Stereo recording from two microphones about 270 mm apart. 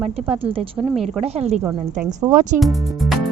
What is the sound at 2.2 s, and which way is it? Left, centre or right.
Speech, centre.